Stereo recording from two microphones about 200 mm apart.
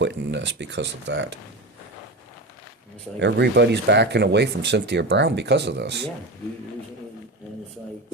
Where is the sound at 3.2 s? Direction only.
60° right (ahead or behind).